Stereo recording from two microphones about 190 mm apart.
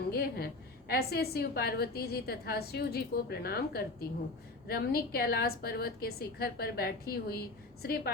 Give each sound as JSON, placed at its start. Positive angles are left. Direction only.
{"t": 0.1, "sound": "a woman's voice", "side_deg": 55}